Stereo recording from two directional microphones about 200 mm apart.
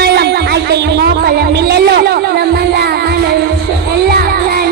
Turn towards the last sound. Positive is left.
turn(degrees=-50)  # may be behind; listen again after turning